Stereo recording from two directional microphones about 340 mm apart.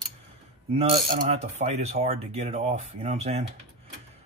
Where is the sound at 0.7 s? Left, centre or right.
Centre.